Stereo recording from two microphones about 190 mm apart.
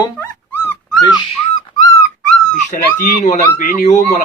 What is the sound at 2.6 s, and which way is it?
Speech, 45° left (ahead or behind).